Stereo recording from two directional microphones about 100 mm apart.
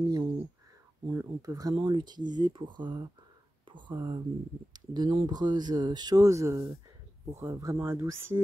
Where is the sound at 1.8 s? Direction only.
50° right (ahead or behind); by 6.7 s 30° right (ahead or behind).